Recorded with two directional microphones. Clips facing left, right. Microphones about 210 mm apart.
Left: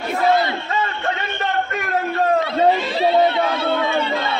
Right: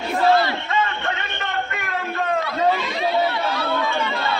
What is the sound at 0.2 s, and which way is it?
Battle cry, 20° left (ahead or behind).